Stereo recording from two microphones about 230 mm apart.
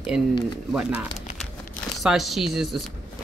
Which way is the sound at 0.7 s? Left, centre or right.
Centre.